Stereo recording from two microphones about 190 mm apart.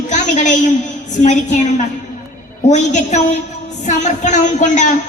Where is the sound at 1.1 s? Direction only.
40° left (ahead or behind).